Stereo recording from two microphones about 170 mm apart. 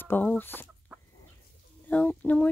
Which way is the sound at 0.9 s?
10° right (ahead or behind).